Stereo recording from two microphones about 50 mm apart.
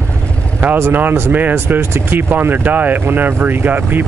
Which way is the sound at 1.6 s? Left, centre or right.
Right.